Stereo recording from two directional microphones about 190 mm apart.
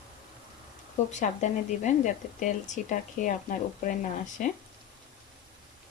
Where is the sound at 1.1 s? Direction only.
40° left (ahead or behind).